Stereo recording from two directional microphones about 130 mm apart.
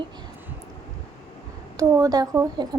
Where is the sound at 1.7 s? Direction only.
25° right (ahead or behind).